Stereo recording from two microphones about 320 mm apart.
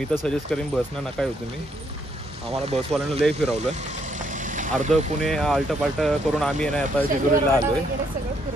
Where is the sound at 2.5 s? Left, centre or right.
Centre.